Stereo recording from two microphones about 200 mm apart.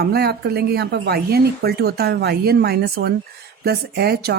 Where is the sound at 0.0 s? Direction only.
55° right (ahead or behind).